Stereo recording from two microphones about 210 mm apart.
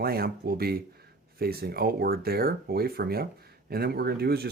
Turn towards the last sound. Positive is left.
turn(degrees=-50)  # may be behind; listen again after turning